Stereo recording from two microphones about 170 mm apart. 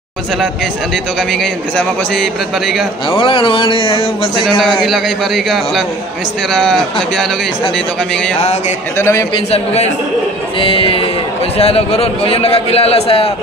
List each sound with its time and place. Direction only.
1.4 s a man's voice: centre (ahead or behind)
3.1 s a man's voice: 30° left (ahead or behind)
4.8 s a man's voice: centre (ahead or behind)
8.9 s a man's voice: 15° left (ahead or behind)
10.6 s a man's voice: 30° left (ahead or behind)